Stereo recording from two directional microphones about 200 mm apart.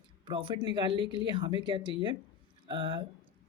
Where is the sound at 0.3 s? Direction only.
25° right (ahead or behind).